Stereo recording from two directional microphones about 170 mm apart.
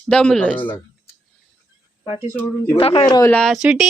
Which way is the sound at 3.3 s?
Centre (ahead or behind).